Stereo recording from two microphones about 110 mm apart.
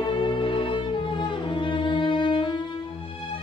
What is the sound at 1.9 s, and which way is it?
Music, 45° left (ahead or behind).